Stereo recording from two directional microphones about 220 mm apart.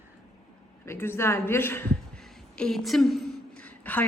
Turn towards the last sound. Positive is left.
turn(degrees=5)  # may be behind; listen again after turning